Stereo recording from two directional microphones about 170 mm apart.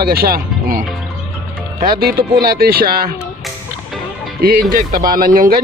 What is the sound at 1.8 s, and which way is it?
Speech, 60° right (ahead or behind).